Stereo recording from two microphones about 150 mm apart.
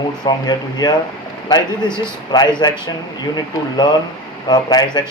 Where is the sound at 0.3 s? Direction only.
25° left (ahead or behind).